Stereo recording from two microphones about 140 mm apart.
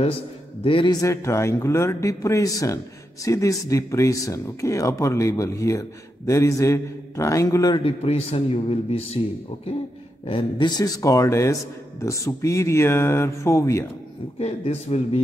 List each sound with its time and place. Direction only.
0.7 s a man's voice: 40° left (ahead or behind)
1.0 s speech: 20° left (ahead or behind)
7.8 s a man's voice: 45° left (ahead or behind)
10.2 s speech: 35° left (ahead or behind)
14.4 s a man's voice: 45° left (ahead or behind)